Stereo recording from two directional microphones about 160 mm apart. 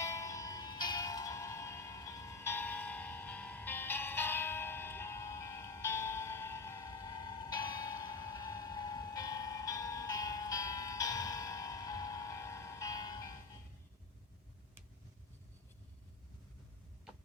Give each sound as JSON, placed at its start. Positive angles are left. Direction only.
{"t": 0.0, "sound": "music", "side_deg": 20}